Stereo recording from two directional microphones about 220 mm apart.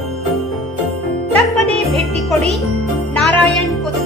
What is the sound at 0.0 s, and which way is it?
Jingle bell, centre (ahead or behind).